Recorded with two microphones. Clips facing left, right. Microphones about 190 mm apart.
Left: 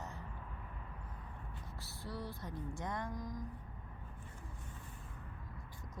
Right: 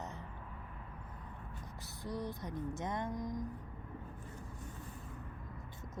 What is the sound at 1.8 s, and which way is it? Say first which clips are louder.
Speech: right 4 dB; 20° right (ahead or behind).